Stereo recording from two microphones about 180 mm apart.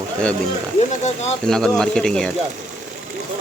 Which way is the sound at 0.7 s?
40° left (ahead or behind).